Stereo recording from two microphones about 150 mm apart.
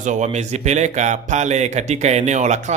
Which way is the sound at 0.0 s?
55° right (ahead or behind).